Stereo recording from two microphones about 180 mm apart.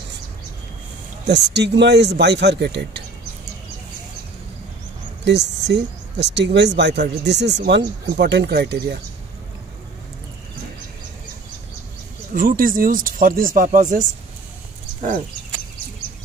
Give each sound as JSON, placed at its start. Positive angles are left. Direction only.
{"t": 1.2, "sound": "speech", "side_deg": -70}
{"t": 5.2, "sound": "speech", "side_deg": -70}
{"t": 12.4, "sound": "speech", "side_deg": -50}
{"t": 15.0, "sound": "bird", "side_deg": -45}